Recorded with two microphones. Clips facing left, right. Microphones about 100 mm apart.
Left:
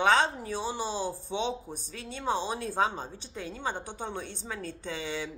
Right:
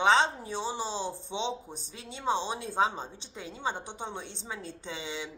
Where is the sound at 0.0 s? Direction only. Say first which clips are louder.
Even; 20° right (ahead or behind).